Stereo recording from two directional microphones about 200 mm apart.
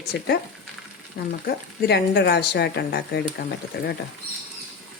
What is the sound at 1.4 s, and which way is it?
A woman's voice, 55° left (ahead or behind).